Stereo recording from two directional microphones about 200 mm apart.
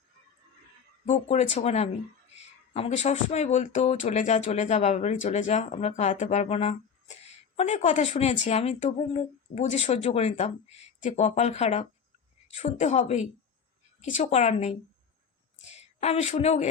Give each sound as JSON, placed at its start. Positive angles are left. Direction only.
{"t": 1.0, "sound": "a woman's voice", "side_deg": 35}